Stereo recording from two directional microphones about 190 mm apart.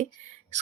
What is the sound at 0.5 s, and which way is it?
Owl, 40° right (ahead or behind).